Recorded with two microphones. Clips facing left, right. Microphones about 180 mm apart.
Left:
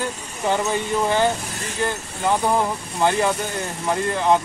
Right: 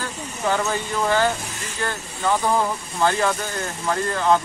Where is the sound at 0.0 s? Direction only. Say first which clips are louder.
Left 1 dB; 20° left (ahead or behind).